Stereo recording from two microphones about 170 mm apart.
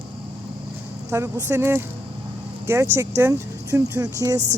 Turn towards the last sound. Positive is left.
turn(degrees=-20)  # may be behind; listen again after turning